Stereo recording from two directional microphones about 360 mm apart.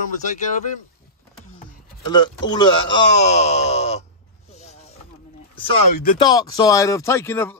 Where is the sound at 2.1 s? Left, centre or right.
Centre.